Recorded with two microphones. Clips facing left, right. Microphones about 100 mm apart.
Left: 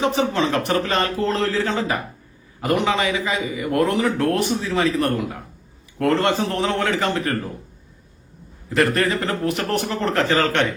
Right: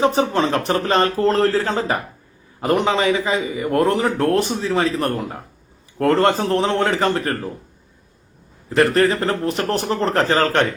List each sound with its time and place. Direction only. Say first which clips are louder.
0.0 s a man's voice: right 3 dB; 35° right (ahead or behind)
8.7 s a man's voice: right 4 dB; 35° right (ahead or behind)